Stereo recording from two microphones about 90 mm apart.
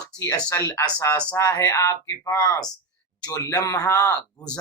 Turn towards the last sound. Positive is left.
turn(degrees=40)  # may be behind; listen again after turning